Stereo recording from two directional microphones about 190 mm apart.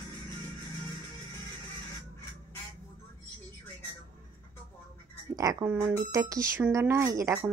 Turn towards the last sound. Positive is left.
turn(degrees=-15)  # may be behind; listen again after turning